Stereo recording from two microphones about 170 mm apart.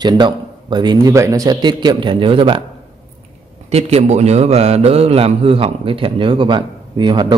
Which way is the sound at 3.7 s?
40° right (ahead or behind).